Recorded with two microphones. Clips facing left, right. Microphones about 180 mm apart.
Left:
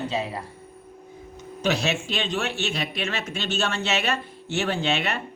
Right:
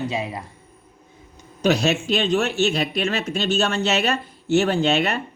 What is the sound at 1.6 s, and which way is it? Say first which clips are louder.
Speech: right 5 dB; 40° right (ahead or behind).